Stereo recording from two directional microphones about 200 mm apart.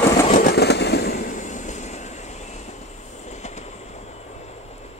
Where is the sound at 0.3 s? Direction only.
45° left (ahead or behind).